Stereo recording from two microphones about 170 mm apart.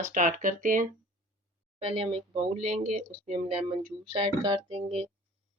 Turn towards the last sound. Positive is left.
turn(degrees=-40)  # may be behind; listen again after turning